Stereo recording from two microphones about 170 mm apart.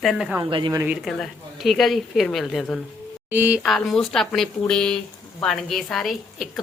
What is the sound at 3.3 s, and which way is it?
Speech, 10° right (ahead or behind).